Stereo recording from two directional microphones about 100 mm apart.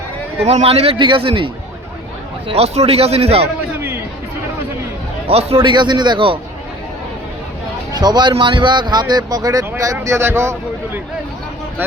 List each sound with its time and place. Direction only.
0.4 s a man's voice: 80° right; by 1.5 s 60° right (ahead or behind)
2.5 s a man's voice: 90° right
3.8 s chatter: 25° right (ahead or behind)
5.3 s a man's voice: 90° right
5.6 s a man's voice: 50° right (ahead or behind)
7.9 s a man's voice: 45° right (ahead or behind); by 11.0 s 25° right (ahead or behind)